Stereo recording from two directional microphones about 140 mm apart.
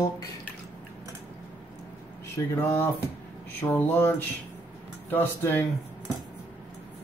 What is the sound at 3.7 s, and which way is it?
Speech, 15° left (ahead or behind).